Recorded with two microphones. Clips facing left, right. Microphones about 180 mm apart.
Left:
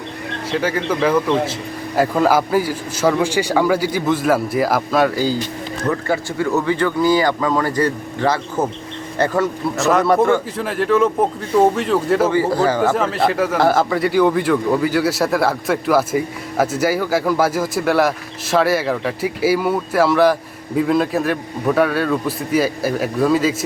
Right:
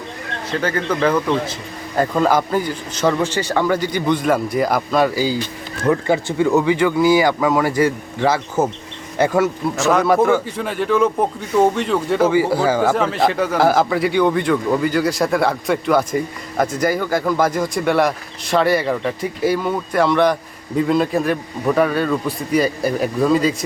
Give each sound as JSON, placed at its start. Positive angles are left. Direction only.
{"t": 0.5, "sound": "a man's voice", "side_deg": 5}
{"t": 5.9, "sound": "speech", "side_deg": -20}
{"t": 9.7, "sound": "a man's voice", "side_deg": 0}
{"t": 12.3, "sound": "speech", "side_deg": -10}
{"t": 12.9, "sound": "a man's voice", "side_deg": 0}